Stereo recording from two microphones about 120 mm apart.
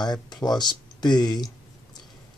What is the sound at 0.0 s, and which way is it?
Speech, 35° left (ahead or behind).